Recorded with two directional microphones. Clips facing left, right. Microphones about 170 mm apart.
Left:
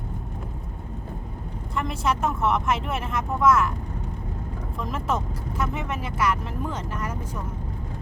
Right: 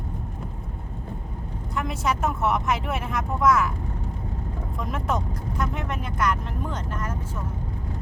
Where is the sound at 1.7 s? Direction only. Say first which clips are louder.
Left 1 dB; centre (ahead or behind).